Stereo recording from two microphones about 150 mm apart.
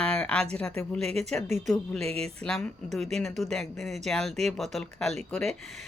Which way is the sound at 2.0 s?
45° right (ahead or behind).